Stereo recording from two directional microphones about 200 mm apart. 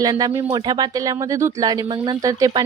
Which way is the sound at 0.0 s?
20° right (ahead or behind).